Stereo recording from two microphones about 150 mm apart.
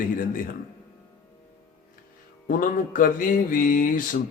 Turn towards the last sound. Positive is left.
turn(degrees=65)  # may be behind; listen again after turning